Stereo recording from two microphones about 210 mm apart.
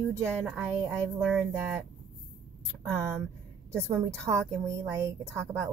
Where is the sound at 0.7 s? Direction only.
5° left (ahead or behind).